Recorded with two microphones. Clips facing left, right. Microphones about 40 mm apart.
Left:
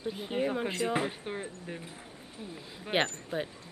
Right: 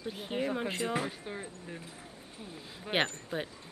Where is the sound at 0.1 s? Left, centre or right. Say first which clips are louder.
Left 2 dB; centre.